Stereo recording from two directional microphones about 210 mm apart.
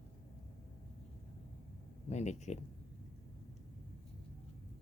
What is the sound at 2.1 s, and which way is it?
Speech, 30° left (ahead or behind).